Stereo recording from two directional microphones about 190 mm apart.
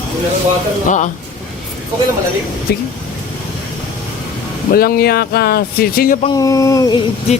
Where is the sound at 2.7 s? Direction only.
55° left (ahead or behind).